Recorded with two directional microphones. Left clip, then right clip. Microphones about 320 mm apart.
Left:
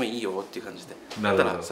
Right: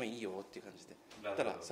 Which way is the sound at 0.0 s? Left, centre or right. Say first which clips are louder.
Left 13 dB; right.